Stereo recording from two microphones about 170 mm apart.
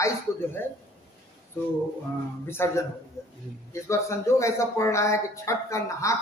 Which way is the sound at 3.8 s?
15° left (ahead or behind).